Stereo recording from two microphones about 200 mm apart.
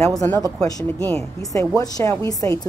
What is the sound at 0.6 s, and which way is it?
A woman's voice, 15° left (ahead or behind).